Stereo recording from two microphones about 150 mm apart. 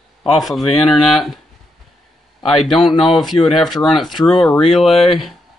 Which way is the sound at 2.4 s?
Centre (ahead or behind).